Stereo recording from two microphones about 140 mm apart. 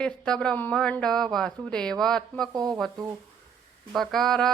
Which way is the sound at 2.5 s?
30° right (ahead or behind).